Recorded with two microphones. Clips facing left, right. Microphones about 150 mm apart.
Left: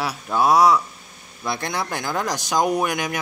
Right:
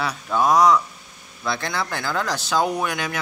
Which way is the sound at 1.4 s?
20° left (ahead or behind).